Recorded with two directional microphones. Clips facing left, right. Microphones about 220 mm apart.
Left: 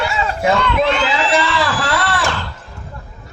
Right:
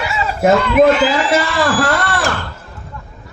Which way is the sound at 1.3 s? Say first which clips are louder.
Right 3 dB; 50° right (ahead or behind).